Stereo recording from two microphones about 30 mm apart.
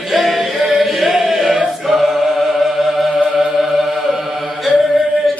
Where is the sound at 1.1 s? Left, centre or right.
Centre.